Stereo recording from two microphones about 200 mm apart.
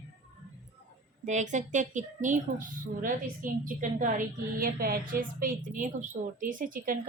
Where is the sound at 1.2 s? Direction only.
35° right (ahead or behind).